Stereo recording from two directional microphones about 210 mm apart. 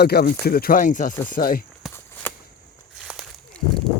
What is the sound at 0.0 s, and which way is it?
Speech, 50° left (ahead or behind).